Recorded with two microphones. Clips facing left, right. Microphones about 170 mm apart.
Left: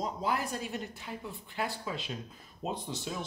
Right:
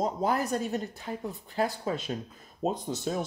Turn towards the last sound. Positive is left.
turn(degrees=-45)  # may be behind; listen again after turning